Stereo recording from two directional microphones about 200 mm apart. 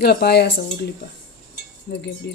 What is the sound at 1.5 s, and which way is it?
Chink, 60° left (ahead or behind).